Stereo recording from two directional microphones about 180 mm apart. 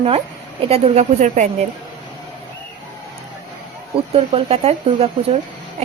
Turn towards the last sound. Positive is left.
turn(degrees=-35)  # may be behind; listen again after turning